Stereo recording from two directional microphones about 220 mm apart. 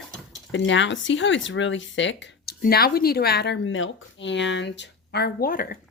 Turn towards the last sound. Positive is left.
turn(degrees=40)  # may be behind; listen again after turning